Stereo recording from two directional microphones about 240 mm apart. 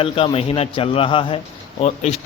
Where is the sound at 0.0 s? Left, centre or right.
Left.